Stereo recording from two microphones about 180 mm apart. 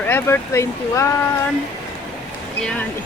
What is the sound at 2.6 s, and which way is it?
Speech, 5° left (ahead or behind).